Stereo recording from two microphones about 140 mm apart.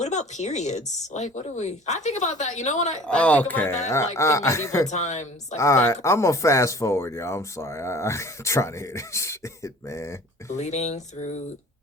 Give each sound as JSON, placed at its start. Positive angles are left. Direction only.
{"t": 0.0, "sound": "speech", "side_deg": 55}
{"t": 3.1, "sound": "speech", "side_deg": 10}
{"t": 4.9, "sound": "speech", "side_deg": 55}
{"t": 5.5, "sound": "speech", "side_deg": 20}
{"t": 10.6, "sound": "speech", "side_deg": 55}